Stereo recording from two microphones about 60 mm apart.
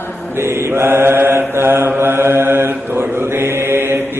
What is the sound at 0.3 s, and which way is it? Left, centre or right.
Mantra, right.